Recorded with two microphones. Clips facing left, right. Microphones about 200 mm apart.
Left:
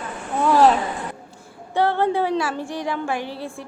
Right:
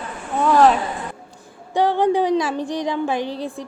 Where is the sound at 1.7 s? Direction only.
15° right (ahead or behind).